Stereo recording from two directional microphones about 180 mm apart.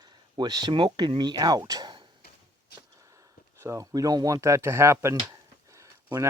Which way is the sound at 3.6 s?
15° right (ahead or behind).